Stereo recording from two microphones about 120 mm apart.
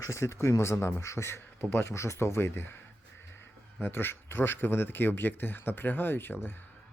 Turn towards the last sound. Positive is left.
turn(degrees=15)  # may be behind; listen again after turning